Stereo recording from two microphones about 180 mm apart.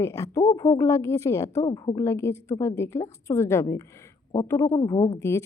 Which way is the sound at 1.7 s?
25° left (ahead or behind).